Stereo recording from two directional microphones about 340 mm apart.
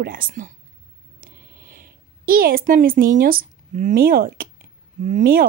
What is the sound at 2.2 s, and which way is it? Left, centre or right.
Speech, right.